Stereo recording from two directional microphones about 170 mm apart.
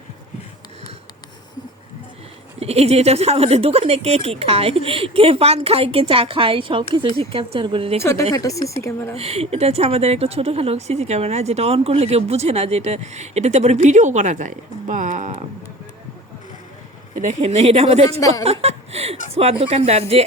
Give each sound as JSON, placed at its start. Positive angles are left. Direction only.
{"t": 2.6, "sound": "speech", "side_deg": -35}
{"t": 8.3, "sound": "speech", "side_deg": 20}
{"t": 9.1, "sound": "speech", "side_deg": -35}
{"t": 17.2, "sound": "speech", "side_deg": -45}